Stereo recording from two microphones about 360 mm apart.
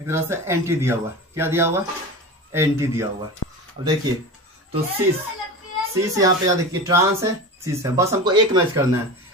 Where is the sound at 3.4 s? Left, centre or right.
Left.